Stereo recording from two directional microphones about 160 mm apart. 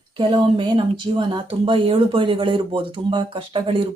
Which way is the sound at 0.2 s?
35° right (ahead or behind).